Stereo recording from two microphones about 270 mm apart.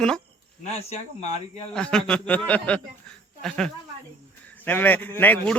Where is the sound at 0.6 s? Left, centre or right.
Left.